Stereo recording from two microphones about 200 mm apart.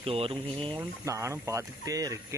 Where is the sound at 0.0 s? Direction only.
30° right (ahead or behind).